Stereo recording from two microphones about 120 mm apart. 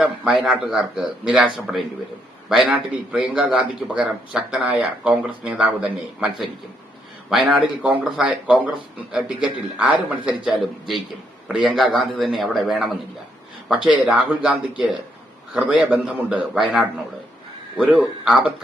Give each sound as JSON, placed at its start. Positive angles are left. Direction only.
{"t": 0.0, "sound": "a man's voice", "side_deg": -10}